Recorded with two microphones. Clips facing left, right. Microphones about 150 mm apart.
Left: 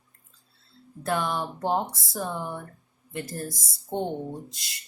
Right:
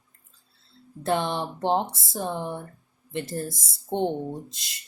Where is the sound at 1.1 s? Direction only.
25° right (ahead or behind).